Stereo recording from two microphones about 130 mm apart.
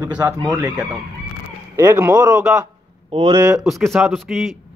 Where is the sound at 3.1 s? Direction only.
35° right (ahead or behind).